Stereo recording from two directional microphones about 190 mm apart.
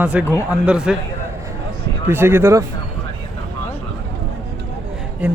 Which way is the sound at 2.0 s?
10° right (ahead or behind).